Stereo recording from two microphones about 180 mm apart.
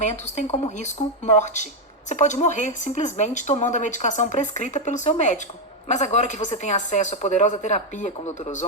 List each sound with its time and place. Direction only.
0.0 s speech: 40° left (ahead or behind)